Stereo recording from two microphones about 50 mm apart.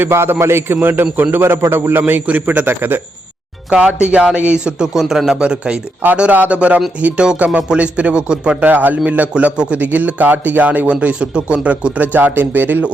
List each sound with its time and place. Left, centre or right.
0.1 s a man's voice: right
1.4 s a man's voice: right
2.2 s speech: right
3.7 s speech: centre
4.9 s speech: centre
6.3 s speech: right
8.6 s speech: right
9.3 s speech: right
11.0 s speech: right